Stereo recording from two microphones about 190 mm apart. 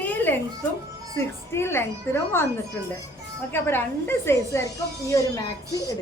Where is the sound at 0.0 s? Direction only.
10° left (ahead or behind).